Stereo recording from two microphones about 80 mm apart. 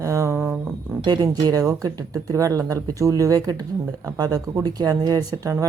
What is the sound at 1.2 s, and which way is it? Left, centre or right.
Speech, right.